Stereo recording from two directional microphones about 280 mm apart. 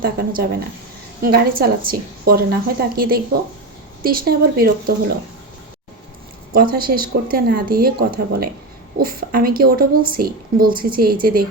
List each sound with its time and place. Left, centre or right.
0.0 s a woman's voice: right
6.5 s a woman's voice: right